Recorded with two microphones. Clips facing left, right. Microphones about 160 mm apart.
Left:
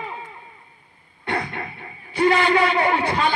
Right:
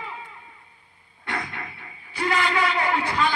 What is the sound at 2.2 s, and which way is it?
A man's voice, 30° left (ahead or behind).